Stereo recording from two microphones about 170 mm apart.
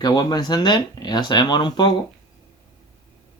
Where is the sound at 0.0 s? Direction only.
25° left (ahead or behind).